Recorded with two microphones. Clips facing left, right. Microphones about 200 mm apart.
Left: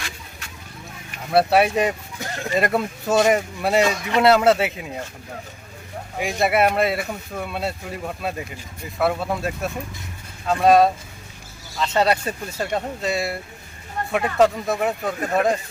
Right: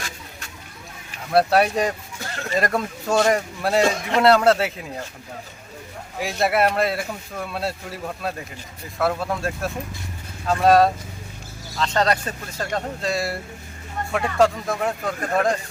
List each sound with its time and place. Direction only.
1.3 s speech: 5° left (ahead or behind)
2.2 s a sound: 15° left (ahead or behind)
2.6 s speech: 5° left (ahead or behind)
6.2 s speech: centre (ahead or behind)